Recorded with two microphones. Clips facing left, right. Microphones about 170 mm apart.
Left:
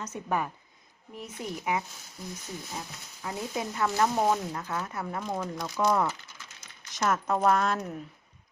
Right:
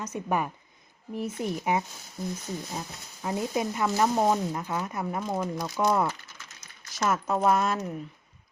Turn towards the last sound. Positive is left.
turn(degrees=-5)  # may be behind; listen again after turning